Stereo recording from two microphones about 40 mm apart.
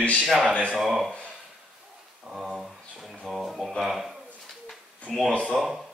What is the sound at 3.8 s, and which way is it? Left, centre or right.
Speech, centre.